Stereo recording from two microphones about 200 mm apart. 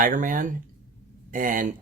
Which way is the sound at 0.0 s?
40° right (ahead or behind).